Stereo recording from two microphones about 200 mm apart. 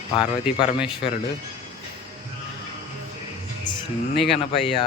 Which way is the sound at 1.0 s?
50° left (ahead or behind).